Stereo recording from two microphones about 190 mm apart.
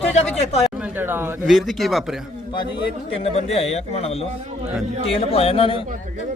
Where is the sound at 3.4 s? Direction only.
35° left (ahead or behind).